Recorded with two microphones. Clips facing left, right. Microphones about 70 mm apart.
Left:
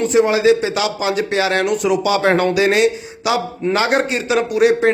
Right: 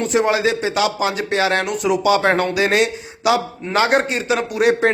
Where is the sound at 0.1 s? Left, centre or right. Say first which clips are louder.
Left 5 dB; right.